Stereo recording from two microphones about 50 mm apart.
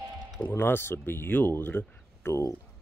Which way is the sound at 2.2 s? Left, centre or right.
Left.